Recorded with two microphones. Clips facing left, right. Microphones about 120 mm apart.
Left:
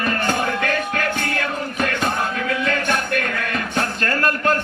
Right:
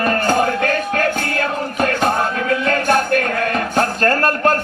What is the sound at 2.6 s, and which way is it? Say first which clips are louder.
Speech: right 6 dB; 40° right (ahead or behind).